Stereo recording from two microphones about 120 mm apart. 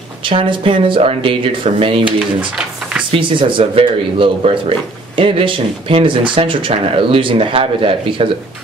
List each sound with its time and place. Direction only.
0.3 s speech: 45° right (ahead or behind)
3.1 s speech: 45° right (ahead or behind)